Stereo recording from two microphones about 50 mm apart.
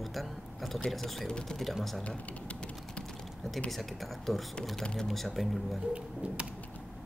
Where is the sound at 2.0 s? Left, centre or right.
Left.